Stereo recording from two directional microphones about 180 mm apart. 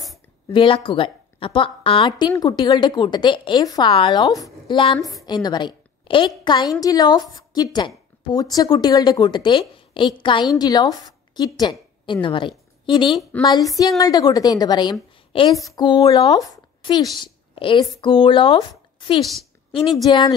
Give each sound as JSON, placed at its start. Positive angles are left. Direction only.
{"t": 0.5, "sound": "a woman's voice", "side_deg": 30}
{"t": 16.3, "sound": "a woman's voice", "side_deg": 20}